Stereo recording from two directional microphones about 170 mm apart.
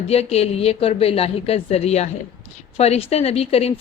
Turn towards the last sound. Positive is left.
turn(degrees=35)  # may be behind; listen again after turning